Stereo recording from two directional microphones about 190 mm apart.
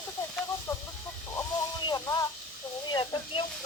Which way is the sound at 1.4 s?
20° left (ahead or behind).